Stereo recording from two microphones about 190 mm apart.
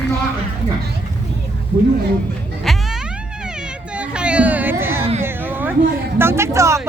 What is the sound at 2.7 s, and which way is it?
Music, centre (ahead or behind).